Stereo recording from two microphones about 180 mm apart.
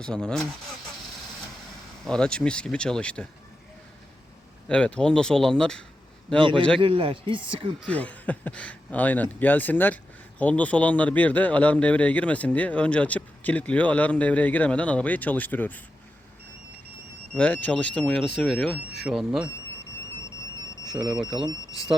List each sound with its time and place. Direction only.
0.0 s speech: 5° left (ahead or behind)
2.0 s speech: 5° left (ahead or behind)
4.7 s speech: 5° left (ahead or behind)
6.7 s speech: 30° right (ahead or behind)
7.8 s speech: 5° left (ahead or behind)
17.3 s speech: 10° left (ahead or behind)
20.8 s speech: 5° right (ahead or behind)